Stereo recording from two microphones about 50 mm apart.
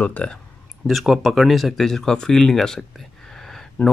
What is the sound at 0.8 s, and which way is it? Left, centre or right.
Speech, centre.